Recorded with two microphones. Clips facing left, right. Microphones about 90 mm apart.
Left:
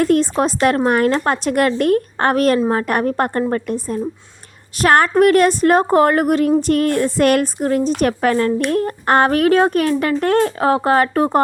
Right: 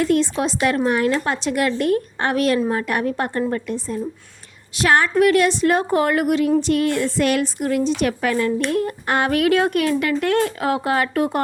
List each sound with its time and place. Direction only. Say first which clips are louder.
0.0 s a woman's voice: left 4 dB; 45° left (ahead or behind)
7.6 s a woman's voice: left 3 dB; 40° left (ahead or behind)